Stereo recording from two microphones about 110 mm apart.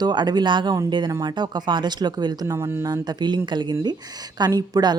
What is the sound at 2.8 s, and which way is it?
A woman's voice, 40° right (ahead or behind).